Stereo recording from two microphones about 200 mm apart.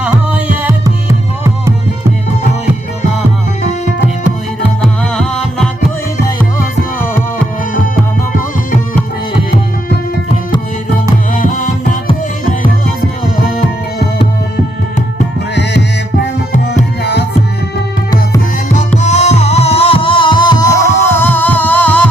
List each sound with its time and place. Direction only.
0.0 s music: 5° right (ahead or behind)
4.8 s music: 5° left (ahead or behind)
11.3 s music: 40° left (ahead or behind)
17.0 s music: 55° left (ahead or behind)
18.9 s music: 35° left (ahead or behind); by 22.0 s 10° left (ahead or behind)